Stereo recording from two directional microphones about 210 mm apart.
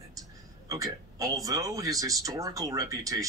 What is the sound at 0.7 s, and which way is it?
Speech, 15° right (ahead or behind).